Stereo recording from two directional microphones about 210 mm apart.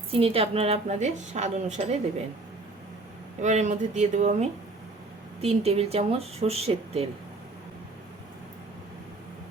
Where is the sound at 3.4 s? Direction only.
35° right (ahead or behind).